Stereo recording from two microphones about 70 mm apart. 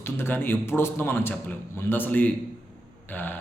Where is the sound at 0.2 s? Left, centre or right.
Left.